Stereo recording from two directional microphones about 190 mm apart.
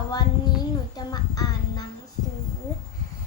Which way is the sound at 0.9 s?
20° left (ahead or behind).